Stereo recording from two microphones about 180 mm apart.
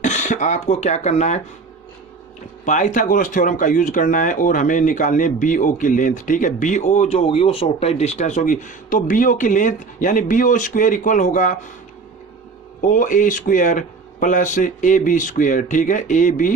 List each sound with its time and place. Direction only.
0.0 s speech: 45° left (ahead or behind)
2.6 s speech: 45° left (ahead or behind)
12.9 s speech: 45° left (ahead or behind)